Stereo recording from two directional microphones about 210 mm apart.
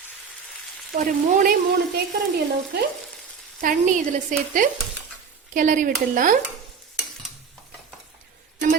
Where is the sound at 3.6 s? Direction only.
40° right (ahead or behind).